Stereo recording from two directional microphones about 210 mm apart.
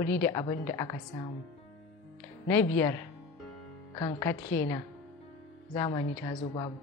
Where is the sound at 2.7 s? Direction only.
15° left (ahead or behind).